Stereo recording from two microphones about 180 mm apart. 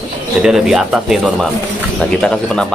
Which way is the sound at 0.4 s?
5° right (ahead or behind).